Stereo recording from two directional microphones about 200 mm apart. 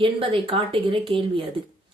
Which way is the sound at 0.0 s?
25° right (ahead or behind).